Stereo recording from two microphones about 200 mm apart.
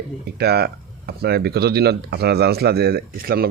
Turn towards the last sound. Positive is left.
turn(degrees=-50)  # may be behind; listen again after turning